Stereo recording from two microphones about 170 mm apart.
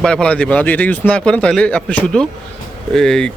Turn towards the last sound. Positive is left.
turn(degrees=5)  # may be behind; listen again after turning